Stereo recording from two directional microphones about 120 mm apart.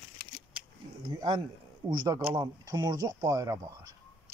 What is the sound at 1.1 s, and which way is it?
Speech, 35° right (ahead or behind).